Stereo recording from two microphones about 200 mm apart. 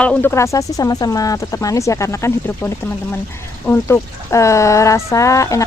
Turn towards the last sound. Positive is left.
turn(degrees=15)  # may be behind; listen again after turning